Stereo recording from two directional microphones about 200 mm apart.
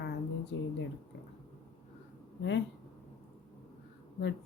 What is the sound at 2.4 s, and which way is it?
Speech, 65° left (ahead or behind).